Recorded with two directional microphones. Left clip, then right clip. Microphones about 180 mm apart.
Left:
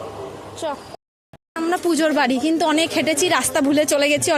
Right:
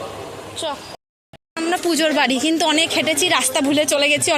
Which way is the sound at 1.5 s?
20° left (ahead or behind).